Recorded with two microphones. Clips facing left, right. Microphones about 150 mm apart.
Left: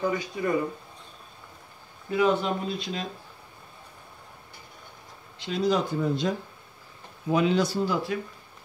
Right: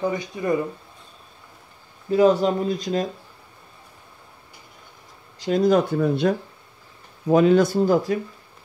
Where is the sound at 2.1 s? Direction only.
35° right (ahead or behind).